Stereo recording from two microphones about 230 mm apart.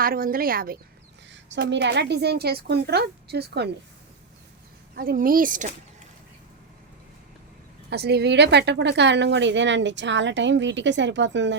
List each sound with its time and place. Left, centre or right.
0.0 s speech: right
1.3 s a woman's voice: right
4.9 s speech: right
7.9 s a woman's voice: right